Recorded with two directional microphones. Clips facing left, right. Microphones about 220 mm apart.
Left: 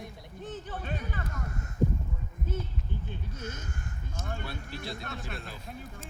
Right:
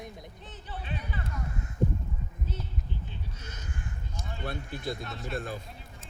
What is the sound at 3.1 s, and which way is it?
Speech, 50° left (ahead or behind).